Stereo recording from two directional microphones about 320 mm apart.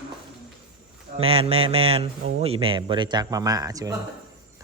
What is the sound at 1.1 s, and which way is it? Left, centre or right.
Speech, centre.